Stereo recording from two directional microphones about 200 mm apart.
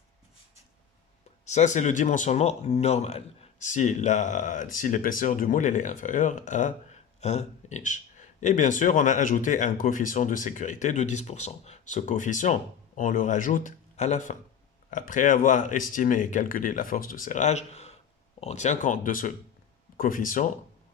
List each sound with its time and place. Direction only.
1.5 s speech: 35° left (ahead or behind)